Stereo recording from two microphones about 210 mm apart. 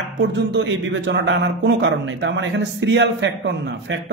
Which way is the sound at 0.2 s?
55° right (ahead or behind).